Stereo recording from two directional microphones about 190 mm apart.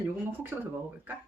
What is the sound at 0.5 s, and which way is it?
Speech, 10° right (ahead or behind).